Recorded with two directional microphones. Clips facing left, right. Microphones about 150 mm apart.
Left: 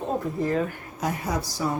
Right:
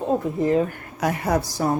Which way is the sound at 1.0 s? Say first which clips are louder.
Right 6 dB; 65° right (ahead or behind).